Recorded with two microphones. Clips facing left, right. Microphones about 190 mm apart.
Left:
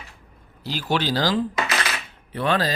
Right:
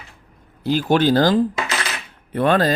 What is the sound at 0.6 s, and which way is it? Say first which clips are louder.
Speech: right 8 dB; 50° right (ahead or behind).